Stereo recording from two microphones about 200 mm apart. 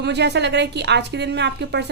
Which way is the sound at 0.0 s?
60° right (ahead or behind).